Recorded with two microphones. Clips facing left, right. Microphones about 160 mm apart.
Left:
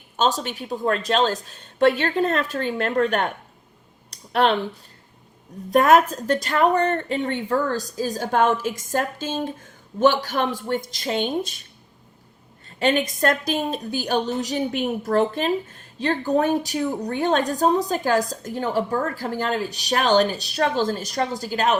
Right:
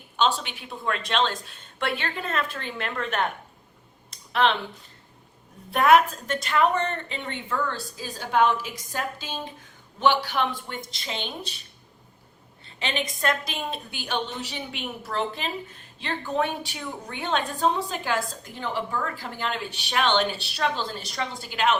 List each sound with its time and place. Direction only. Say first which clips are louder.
0.2 s a woman's voice: left 3 dB; 40° left (ahead or behind)
4.1 s a sound: left 3 dB; 45° left (ahead or behind)
5.7 s a woman's voice: left 3 dB; 40° left (ahead or behind)
12.6 s a woman's voice: left 9 dB; 45° left (ahead or behind)